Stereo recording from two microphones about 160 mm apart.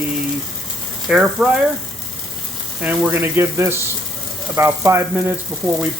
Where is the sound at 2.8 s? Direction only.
10° right (ahead or behind).